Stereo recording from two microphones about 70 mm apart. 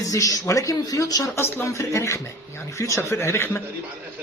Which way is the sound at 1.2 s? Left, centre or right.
Left.